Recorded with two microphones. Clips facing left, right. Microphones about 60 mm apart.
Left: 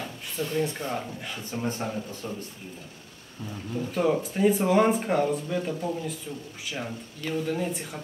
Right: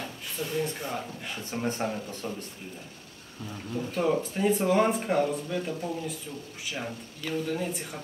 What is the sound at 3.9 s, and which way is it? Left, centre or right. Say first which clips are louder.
A man's voice: left 2 dB; centre.